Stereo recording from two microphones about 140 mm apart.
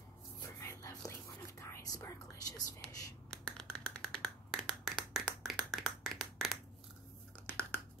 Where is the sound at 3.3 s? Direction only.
5° left (ahead or behind).